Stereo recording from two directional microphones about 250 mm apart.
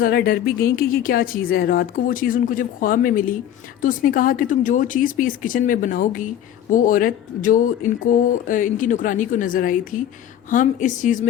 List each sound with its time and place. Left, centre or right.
0.0 s speech: left